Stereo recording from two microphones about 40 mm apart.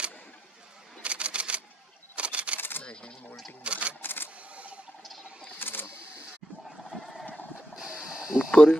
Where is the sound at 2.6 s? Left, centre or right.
Left.